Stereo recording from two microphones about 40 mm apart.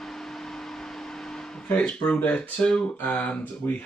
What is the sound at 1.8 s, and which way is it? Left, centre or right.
Speech, left.